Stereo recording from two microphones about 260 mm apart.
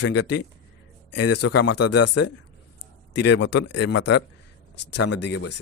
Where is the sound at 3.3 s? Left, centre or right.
Left.